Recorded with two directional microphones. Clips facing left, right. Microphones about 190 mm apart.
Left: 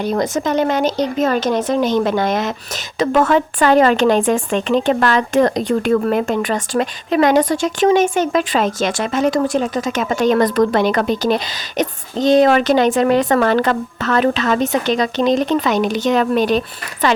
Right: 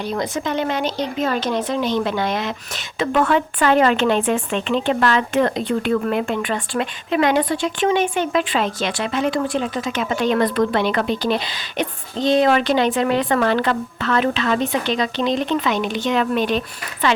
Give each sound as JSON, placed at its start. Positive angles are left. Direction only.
{"t": 0.0, "sound": "speech", "side_deg": 45}